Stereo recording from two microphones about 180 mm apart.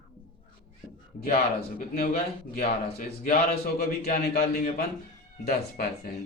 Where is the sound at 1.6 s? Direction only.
50° left (ahead or behind).